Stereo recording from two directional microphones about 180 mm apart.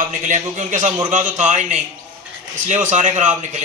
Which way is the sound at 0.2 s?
45° right (ahead or behind).